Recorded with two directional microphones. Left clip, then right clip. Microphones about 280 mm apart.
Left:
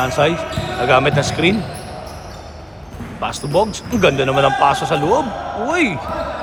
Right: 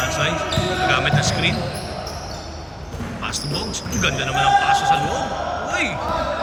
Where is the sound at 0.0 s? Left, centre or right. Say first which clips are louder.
Left 5 dB; centre.